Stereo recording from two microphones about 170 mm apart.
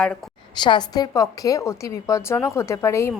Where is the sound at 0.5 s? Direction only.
25° left (ahead or behind).